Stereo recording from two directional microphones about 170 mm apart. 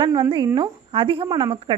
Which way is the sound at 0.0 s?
25° right (ahead or behind).